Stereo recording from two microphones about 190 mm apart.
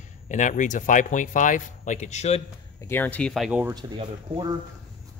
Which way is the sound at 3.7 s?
25° right (ahead or behind).